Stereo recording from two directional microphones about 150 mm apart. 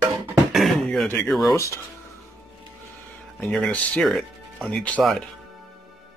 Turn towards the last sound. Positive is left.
turn(degrees=5)  # may be behind; listen again after turning